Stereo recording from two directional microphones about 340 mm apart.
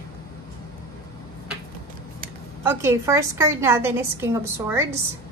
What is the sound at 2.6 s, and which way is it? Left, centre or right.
A woman's voice, centre.